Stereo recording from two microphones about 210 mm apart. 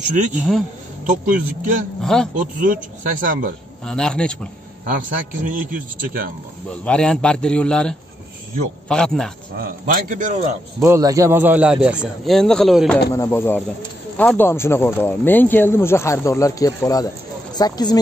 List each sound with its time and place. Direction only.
0.4 s a man's voice: centre (ahead or behind)
1.0 s speech: 35° right (ahead or behind)
2.0 s a man's voice: centre (ahead or behind)
2.3 s speech: 35° right (ahead or behind)
3.8 s a man's voice: 5° left (ahead or behind)
5.4 s speech: 40° right (ahead or behind)
6.7 s a man's voice: 5° left (ahead or behind)
9.6 s speech: 40° right (ahead or behind)
10.8 s a man's voice: 15° right (ahead or behind); by 13.0 s centre (ahead or behind)
13.1 s speech: 15° left (ahead or behind)